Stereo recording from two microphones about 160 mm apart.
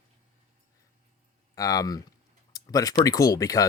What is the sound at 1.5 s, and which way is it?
Speech, 20° left (ahead or behind).